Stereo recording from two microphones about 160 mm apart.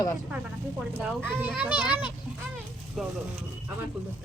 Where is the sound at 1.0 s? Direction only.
10° right (ahead or behind).